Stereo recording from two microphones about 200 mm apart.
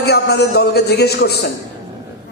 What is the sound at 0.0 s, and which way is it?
Speech, 55° left (ahead or behind).